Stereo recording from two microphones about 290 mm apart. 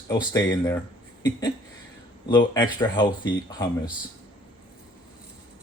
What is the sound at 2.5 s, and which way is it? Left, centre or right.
Speech, centre.